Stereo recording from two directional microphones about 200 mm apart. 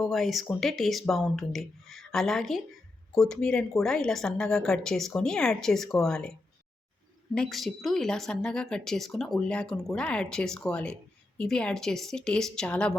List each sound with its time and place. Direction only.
0.0 s speech: centre (ahead or behind)
7.3 s speech: centre (ahead or behind)